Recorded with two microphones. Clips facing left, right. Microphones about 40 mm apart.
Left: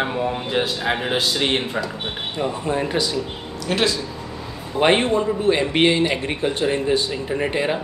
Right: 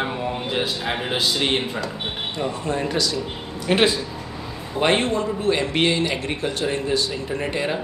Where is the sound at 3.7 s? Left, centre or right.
Right.